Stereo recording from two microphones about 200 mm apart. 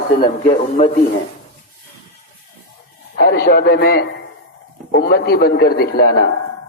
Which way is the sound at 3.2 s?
55° left (ahead or behind).